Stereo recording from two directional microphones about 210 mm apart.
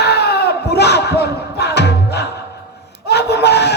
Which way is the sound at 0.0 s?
50° left (ahead or behind).